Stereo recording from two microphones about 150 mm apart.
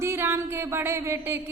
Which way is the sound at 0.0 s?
15° right (ahead or behind).